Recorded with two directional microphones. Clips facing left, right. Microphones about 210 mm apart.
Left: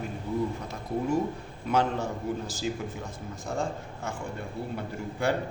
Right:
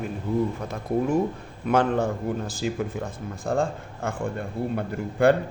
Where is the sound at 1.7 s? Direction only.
55° right (ahead or behind).